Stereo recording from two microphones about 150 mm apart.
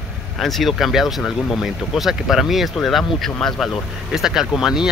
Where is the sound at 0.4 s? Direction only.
Centre (ahead or behind).